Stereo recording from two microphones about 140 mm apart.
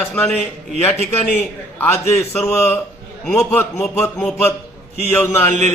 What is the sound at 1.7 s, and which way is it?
A man's voice, 20° left (ahead or behind).